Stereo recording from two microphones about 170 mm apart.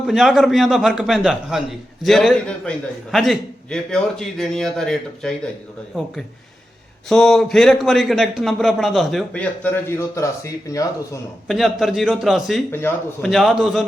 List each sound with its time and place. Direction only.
0.1 s a man's voice: centre (ahead or behind)
7.1 s a man's voice: 5° left (ahead or behind); by 11.2 s 20° left (ahead or behind)
11.4 s a man's voice: centre (ahead or behind)